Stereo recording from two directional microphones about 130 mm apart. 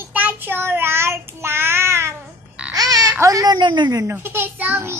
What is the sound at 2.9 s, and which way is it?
Baby cry, 25° right (ahead or behind).